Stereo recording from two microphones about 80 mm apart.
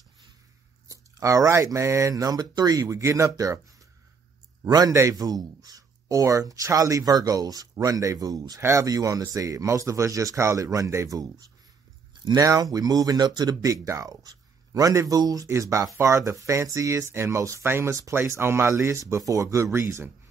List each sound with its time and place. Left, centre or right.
0.8 s speech: right
4.6 s speech: right
17.6 s speech: right